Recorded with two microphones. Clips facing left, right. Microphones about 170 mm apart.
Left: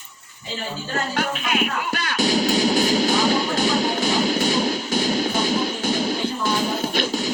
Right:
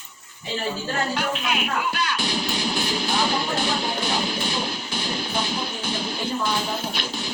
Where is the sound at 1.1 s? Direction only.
50° left (ahead or behind).